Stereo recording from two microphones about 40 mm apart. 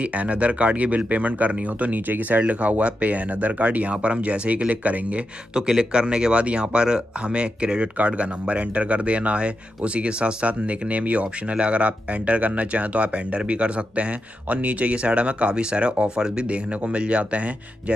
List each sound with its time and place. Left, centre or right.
0.0 s speech: right
2.0 s speech: right
5.5 s speech: right